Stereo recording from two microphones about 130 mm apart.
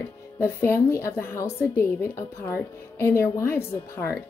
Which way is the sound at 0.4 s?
20° left (ahead or behind).